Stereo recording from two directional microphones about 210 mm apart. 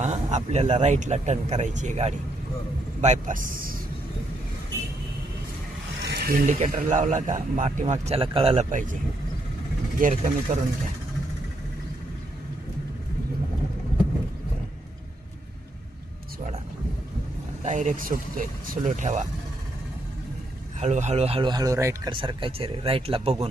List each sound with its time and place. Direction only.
0.0 s speech: 35° right (ahead or behind)
6.1 s speech: 45° right (ahead or behind)
10.0 s speech: 35° right (ahead or behind)
17.6 s speech: 35° right (ahead or behind)
20.7 s speech: 35° right (ahead or behind)